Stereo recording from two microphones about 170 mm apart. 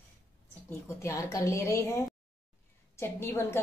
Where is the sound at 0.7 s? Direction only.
15° left (ahead or behind).